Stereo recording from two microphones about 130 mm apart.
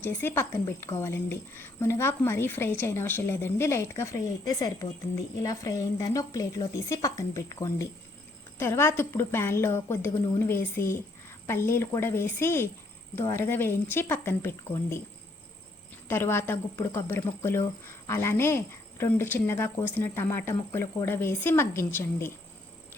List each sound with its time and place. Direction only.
0.0 s a woman's voice: 15° left (ahead or behind)
16.0 s a woman's voice: 20° left (ahead or behind)